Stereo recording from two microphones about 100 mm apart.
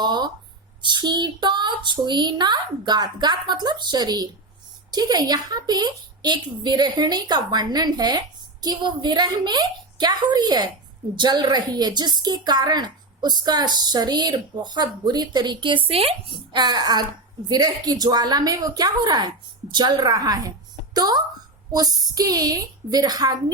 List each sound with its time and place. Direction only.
0.0 s a sound: 50° right (ahead or behind)
0.8 s speech: 50° right (ahead or behind); by 16.1 s 75° right (ahead or behind)
16.5 s a woman's voice: 50° right (ahead or behind)